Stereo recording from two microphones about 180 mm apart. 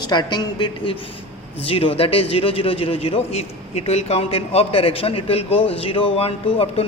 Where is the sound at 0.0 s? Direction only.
25° left (ahead or behind).